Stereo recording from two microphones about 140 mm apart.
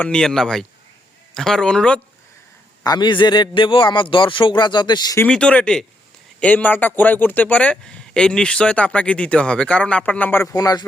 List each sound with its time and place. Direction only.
0.0 s speech: 5° left (ahead or behind)
2.8 s a man's voice: 30° left (ahead or behind)
5.2 s a man's voice: 10° left (ahead or behind)
10.5 s speech: 25° left (ahead or behind)